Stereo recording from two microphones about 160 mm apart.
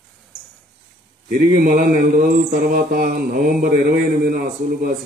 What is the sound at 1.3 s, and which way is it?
Mantra, 65° right (ahead or behind).